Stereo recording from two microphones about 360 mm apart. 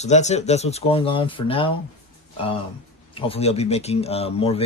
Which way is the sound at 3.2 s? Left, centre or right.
Centre.